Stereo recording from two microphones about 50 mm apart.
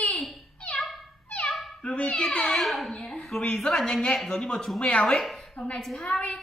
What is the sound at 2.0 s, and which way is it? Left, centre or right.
Speech, left.